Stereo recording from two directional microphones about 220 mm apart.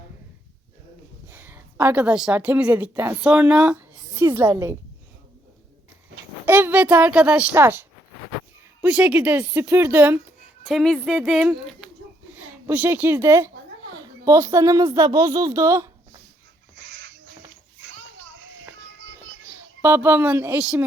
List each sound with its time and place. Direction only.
1.3 s a woman's voice: 10° right (ahead or behind)
6.4 s speech: 10° right (ahead or behind)
18.9 s music: 60° right (ahead or behind)
19.8 s speech: 10° right (ahead or behind)